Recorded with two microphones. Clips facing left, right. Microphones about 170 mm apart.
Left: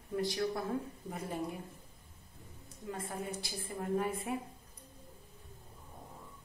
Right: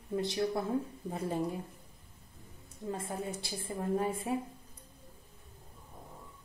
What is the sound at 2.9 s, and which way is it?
A woman's voice, 30° right (ahead or behind).